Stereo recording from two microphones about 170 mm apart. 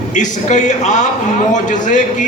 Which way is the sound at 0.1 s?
45° left (ahead or behind).